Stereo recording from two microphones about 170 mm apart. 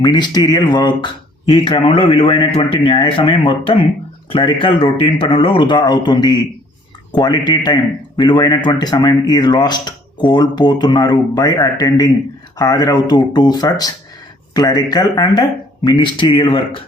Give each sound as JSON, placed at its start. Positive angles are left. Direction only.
{"t": 0.0, "sound": "speech", "side_deg": 25}